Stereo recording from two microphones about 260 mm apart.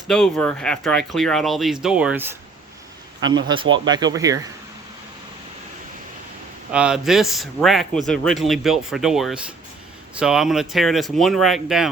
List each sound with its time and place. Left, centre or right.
0.1 s a man's voice: centre
3.5 s speech: centre
6.7 s a man's voice: centre